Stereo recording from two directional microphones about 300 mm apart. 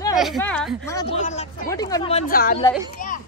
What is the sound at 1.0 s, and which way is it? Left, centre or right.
Speech, left.